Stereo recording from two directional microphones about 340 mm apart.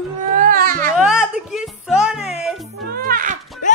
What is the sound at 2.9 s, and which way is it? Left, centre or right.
Music, right.